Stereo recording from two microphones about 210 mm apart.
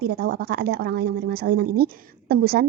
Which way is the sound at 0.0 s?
50° right (ahead or behind).